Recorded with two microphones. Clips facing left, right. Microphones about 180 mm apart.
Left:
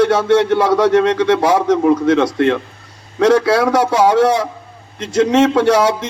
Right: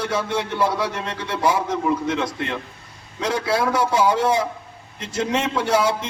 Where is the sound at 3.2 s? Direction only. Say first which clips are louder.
Left 10 dB; 80° left.